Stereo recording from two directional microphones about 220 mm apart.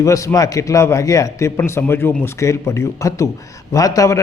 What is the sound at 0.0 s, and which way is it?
A man's voice, 15° left (ahead or behind).